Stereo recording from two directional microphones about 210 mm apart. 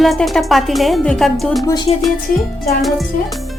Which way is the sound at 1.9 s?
30° left (ahead or behind).